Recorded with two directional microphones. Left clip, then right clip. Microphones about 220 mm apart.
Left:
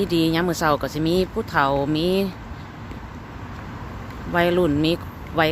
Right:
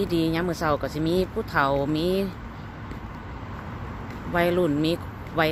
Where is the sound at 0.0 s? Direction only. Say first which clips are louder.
Left 4 dB; 15° left (ahead or behind).